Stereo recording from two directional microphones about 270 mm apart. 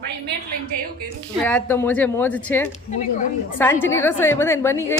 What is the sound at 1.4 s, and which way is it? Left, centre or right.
A woman's voice, centre.